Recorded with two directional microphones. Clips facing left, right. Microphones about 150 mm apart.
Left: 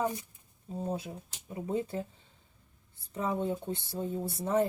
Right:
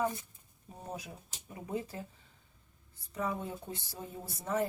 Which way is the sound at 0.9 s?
30° left (ahead or behind).